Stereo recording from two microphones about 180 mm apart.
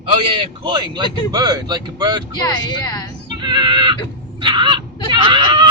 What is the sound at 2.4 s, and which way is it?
Speech, 20° left (ahead or behind).